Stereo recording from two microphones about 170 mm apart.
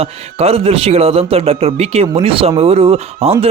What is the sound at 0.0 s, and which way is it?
A man's voice, 35° right (ahead or behind).